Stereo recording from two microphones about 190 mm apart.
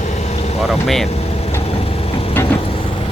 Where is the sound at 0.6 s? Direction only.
Centre (ahead or behind).